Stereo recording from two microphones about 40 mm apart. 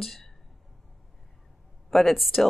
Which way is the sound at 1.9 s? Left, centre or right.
Centre.